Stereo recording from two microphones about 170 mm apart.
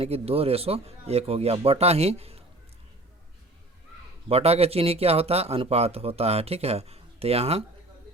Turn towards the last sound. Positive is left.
turn(degrees=-35)  # may be behind; listen again after turning